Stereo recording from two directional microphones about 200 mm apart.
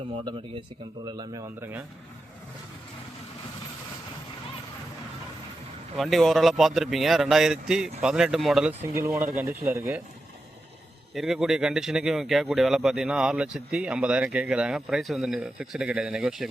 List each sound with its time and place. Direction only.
0.3 s speech: 25° right (ahead or behind)
6.0 s speech: centre (ahead or behind)
9.0 s speech: 15° right (ahead or behind)
11.1 s speech: centre (ahead or behind)